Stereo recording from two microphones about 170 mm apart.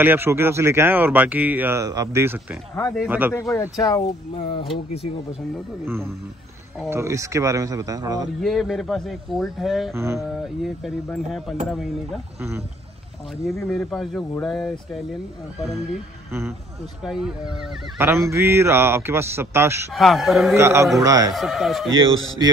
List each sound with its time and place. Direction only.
0.0 s speech: 10° right (ahead or behind)
3.3 s speech: 15° left (ahead or behind)
4.4 s speech: 30° left (ahead or behind)
6.9 s a man's voice: 15° right (ahead or behind)
8.4 s speech: centre (ahead or behind)
9.9 s speech: 15° right (ahead or behind)
10.3 s speech: centre (ahead or behind)
12.4 s speech: 15° right (ahead or behind)
13.7 s speech: centre (ahead or behind)
17.0 s speech: centre (ahead or behind)
17.9 s speech: 15° right (ahead or behind)
19.9 s speech: centre (ahead or behind)
20.5 s a man's voice: 15° right (ahead or behind)
21.3 s speech: centre (ahead or behind)